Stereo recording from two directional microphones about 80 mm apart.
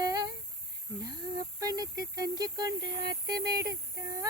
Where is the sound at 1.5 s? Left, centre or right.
Right.